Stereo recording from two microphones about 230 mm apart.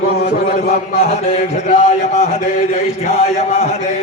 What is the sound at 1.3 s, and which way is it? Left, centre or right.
A man's voice, left.